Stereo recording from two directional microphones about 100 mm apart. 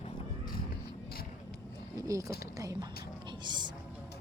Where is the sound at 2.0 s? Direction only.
35° right (ahead or behind).